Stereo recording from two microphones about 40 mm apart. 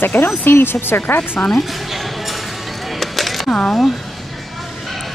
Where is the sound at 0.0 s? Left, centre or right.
Left.